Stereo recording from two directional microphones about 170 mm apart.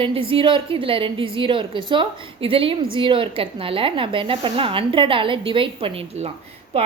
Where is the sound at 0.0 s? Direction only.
30° right (ahead or behind).